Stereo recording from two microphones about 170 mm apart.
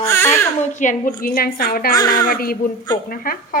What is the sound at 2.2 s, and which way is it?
A woman's voice, 60° left (ahead or behind).